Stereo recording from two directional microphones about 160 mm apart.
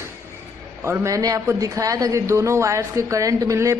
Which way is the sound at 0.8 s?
15° right (ahead or behind).